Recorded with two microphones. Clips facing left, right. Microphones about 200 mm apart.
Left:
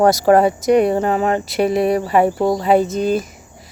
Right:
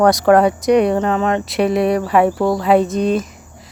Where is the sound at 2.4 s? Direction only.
20° left (ahead or behind).